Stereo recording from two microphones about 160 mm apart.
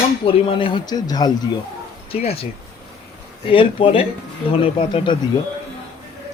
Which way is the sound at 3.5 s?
35° left (ahead or behind).